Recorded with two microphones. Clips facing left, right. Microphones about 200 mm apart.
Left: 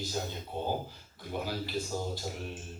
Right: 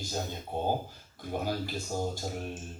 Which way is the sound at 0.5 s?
45° right (ahead or behind).